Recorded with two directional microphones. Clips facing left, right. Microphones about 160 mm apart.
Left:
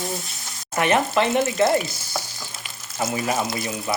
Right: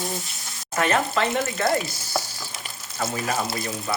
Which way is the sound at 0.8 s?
20° left (ahead or behind).